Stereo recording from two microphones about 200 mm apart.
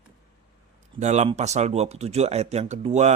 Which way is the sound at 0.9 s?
35° right (ahead or behind).